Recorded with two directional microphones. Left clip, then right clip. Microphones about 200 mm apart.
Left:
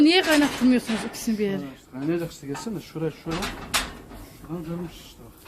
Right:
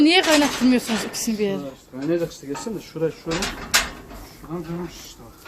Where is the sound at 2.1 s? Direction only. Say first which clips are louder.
Right 5 dB; 35° left (ahead or behind).